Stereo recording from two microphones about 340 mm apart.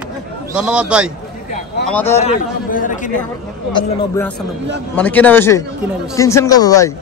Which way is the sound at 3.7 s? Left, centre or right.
Centre.